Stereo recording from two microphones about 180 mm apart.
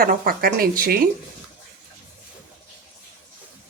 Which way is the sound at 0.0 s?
55° right (ahead or behind).